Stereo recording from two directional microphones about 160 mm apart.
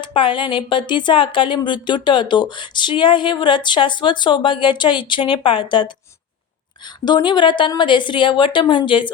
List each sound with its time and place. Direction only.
0.0 s speech: 30° left (ahead or behind)